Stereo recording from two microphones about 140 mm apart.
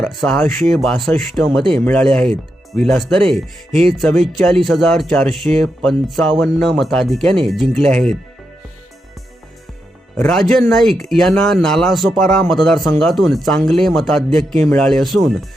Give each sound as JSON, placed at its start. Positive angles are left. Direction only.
{"t": 0.0, "sound": "speech", "side_deg": 5}
{"t": 10.2, "sound": "speech", "side_deg": 5}